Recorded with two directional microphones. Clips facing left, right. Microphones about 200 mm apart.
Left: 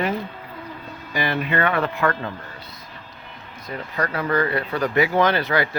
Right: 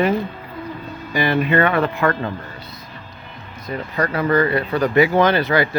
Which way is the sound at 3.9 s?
15° right (ahead or behind).